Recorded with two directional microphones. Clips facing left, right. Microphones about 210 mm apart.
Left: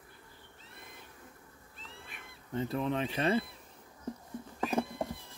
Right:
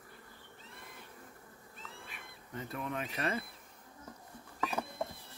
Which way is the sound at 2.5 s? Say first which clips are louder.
Left 7 dB; 30° left (ahead or behind).